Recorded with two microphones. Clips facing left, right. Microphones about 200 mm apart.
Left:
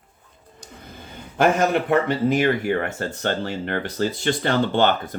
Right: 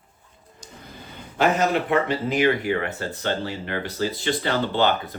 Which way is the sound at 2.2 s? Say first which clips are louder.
Left 2 dB; 45° left (ahead or behind).